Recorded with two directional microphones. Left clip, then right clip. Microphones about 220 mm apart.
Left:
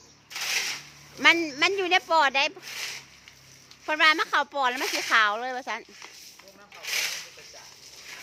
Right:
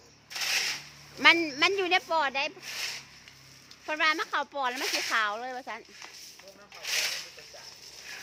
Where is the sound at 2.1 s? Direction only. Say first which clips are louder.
Left 6 dB; 15° left (ahead or behind).